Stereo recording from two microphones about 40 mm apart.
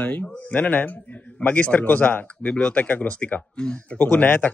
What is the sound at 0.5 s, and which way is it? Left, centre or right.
Speech, left.